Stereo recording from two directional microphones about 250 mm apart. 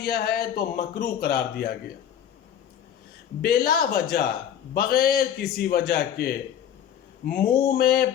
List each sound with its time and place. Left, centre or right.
0.0 s speech: left
3.4 s speech: left